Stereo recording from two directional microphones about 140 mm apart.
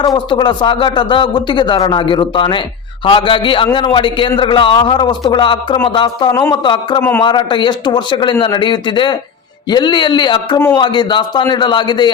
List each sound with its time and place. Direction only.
0.0 s a man's voice: 35° left (ahead or behind)
6.3 s speech: 20° left (ahead or behind)
6.6 s a man's voice: 35° left (ahead or behind)